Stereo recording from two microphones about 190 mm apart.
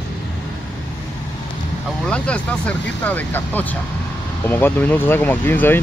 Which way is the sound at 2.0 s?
5° left (ahead or behind).